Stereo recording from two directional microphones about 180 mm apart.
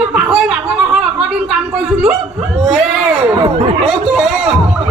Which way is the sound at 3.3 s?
25° right (ahead or behind).